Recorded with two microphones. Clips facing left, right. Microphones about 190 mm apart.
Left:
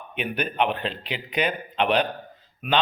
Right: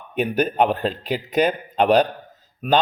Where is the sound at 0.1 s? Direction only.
40° right (ahead or behind).